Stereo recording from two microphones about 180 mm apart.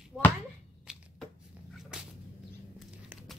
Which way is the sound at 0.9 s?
5° right (ahead or behind).